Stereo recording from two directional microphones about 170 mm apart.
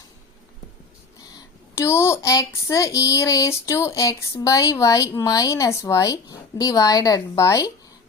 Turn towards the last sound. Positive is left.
turn(degrees=20)  # may be behind; listen again after turning